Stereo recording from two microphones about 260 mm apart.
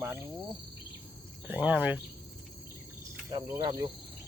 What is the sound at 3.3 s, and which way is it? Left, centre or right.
Cricket, centre.